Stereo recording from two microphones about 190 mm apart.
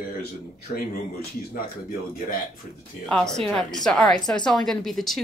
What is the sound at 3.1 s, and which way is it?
A woman's voice, 5° left (ahead or behind).